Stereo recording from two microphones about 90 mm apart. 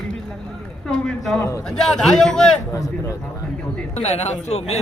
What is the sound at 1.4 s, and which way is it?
Speech, 35° left (ahead or behind).